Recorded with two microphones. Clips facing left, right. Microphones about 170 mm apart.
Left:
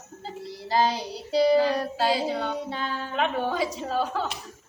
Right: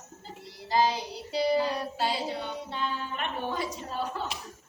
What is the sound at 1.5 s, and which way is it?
A woman's voice, 90° left.